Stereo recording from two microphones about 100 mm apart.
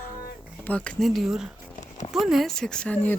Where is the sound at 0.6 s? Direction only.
15° left (ahead or behind).